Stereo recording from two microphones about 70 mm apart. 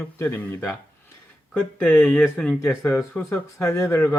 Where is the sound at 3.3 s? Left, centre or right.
Left.